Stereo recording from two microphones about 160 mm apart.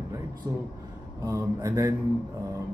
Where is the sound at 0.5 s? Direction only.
15° right (ahead or behind).